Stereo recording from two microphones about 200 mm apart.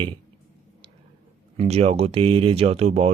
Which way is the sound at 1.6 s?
30° right (ahead or behind).